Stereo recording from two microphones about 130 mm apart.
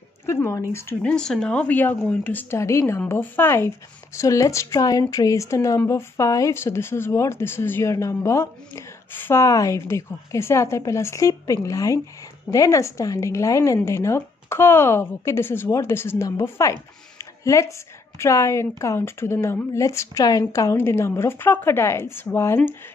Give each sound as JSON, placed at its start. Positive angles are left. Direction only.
{"t": 0.3, "sound": "speech", "side_deg": 20}
{"t": 1.0, "sound": "speech", "side_deg": 5}